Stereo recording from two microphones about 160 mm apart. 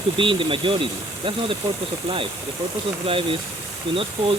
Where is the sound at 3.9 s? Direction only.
35° right (ahead or behind).